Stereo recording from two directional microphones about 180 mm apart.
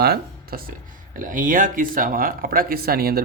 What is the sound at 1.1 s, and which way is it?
Speech, 45° right (ahead or behind).